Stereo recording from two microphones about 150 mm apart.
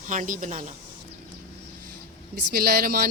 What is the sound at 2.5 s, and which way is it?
Speech, 85° right.